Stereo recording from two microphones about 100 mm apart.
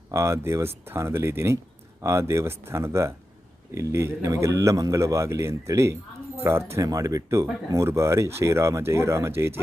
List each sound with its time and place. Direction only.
0.1 s a man's voice: 30° right (ahead or behind)